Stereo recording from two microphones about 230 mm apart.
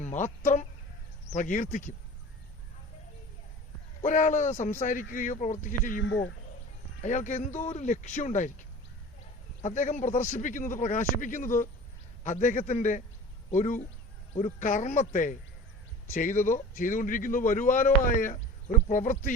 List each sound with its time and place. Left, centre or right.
0.0 s a man's voice: left
4.0 s a man's voice: left
7.0 s a man's voice: left
9.6 s a man's voice: left